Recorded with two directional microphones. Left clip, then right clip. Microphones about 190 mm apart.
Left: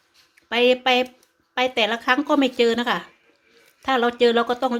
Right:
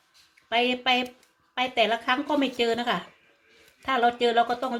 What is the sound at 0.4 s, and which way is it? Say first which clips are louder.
Speech: left 6 dB; 55° left (ahead or behind).